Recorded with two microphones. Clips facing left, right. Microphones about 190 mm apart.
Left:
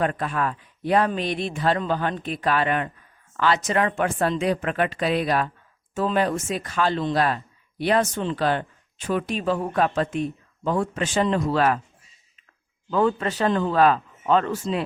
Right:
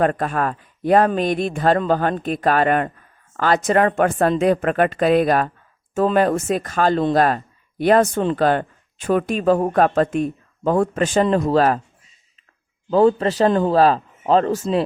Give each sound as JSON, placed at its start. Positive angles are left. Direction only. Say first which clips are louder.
{"t": 0.0, "sound": "speech", "louder": "right 5 dB", "side_deg": -45}
{"t": 12.9, "sound": "speech", "louder": "right 7 dB", "side_deg": -35}